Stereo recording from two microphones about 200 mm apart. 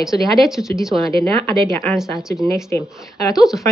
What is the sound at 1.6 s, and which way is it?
Speech, 35° right (ahead or behind).